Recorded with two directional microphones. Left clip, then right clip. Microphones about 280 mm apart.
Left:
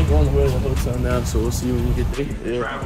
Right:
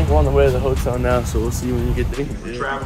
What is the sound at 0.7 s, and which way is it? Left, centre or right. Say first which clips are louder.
Speech: right 5 dB; centre.